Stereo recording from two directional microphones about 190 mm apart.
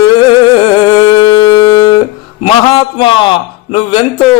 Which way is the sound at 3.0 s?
25° left (ahead or behind).